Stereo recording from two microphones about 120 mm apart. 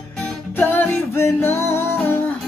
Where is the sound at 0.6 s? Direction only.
15° left (ahead or behind).